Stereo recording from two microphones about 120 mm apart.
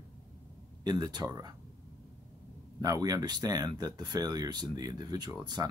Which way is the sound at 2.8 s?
30° right (ahead or behind).